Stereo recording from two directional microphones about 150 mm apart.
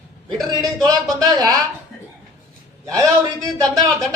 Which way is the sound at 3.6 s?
25° right (ahead or behind).